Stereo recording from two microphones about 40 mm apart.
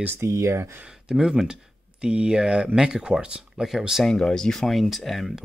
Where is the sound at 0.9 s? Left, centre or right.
Centre.